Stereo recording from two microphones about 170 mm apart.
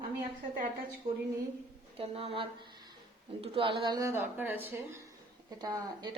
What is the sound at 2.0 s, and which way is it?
A woman's voice, 35° right (ahead or behind).